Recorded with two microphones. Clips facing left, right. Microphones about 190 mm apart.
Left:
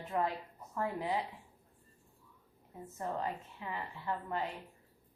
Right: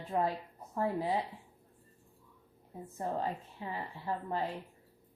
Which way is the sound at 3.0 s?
30° right (ahead or behind).